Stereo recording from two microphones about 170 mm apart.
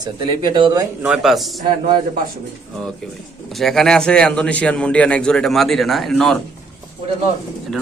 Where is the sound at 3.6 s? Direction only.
Centre (ahead or behind).